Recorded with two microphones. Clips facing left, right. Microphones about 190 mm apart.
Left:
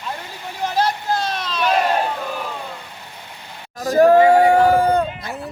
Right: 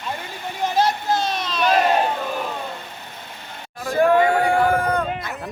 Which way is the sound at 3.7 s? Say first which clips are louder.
Left 5 dB; 40° left (ahead or behind).